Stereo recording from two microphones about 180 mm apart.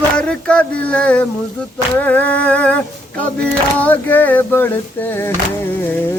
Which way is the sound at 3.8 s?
10° left (ahead or behind).